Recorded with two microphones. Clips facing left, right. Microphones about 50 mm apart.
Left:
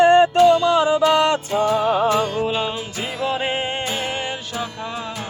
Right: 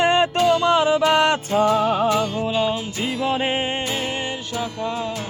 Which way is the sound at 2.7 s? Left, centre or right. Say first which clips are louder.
Right 2 dB; centre.